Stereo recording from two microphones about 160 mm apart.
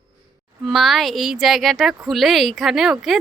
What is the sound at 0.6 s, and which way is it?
A woman's voice, centre (ahead or behind).